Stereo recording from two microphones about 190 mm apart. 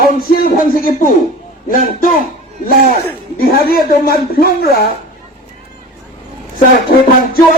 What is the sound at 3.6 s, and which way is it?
Speech, 50° left (ahead or behind).